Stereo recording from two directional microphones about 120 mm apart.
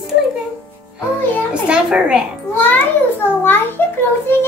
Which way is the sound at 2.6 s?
15° left (ahead or behind).